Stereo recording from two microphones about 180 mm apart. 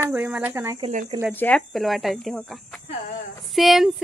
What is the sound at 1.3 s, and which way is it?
Speech, 10° left (ahead or behind).